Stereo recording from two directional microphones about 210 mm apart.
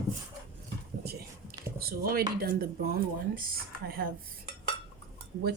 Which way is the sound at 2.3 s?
45° right (ahead or behind).